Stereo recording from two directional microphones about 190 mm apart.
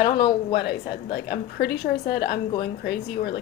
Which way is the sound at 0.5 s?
55° left (ahead or behind).